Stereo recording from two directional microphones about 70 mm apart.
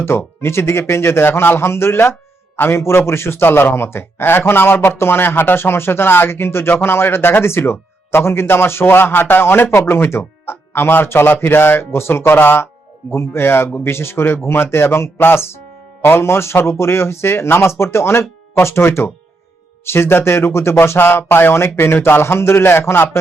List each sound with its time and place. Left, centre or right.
0.0 s a man's voice: left